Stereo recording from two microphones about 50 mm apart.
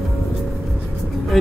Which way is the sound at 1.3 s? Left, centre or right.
Centre.